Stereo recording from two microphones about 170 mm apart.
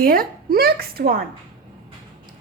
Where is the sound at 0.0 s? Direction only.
60° right (ahead or behind).